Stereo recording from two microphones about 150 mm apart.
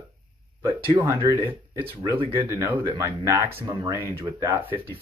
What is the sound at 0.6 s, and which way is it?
Speech, 20° right (ahead or behind).